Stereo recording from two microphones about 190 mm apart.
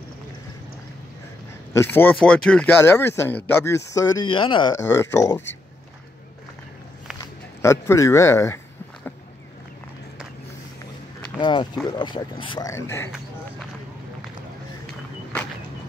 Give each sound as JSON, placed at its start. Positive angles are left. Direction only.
{"t": 1.7, "sound": "speech", "side_deg": 10}
{"t": 7.2, "sound": "speech", "side_deg": 15}
{"t": 11.3, "sound": "speech", "side_deg": 25}